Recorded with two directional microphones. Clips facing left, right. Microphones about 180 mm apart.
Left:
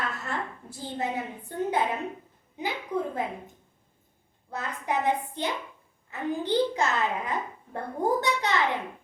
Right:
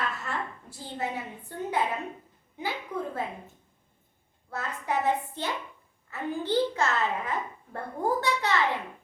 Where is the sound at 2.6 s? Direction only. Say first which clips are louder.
Left 3 dB; 20° left (ahead or behind).